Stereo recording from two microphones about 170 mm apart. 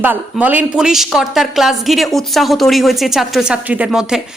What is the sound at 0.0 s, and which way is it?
Speech, 10° right (ahead or behind).